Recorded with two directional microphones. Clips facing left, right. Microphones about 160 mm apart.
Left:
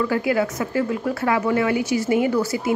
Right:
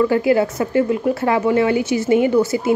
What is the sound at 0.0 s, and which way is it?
A woman's voice, 25° right (ahead or behind).